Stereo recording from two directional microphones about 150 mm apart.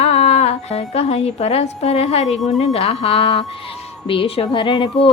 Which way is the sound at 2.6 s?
40° left (ahead or behind).